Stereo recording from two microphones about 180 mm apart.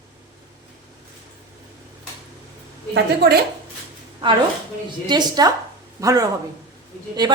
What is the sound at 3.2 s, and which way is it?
Speech, 60° right (ahead or behind).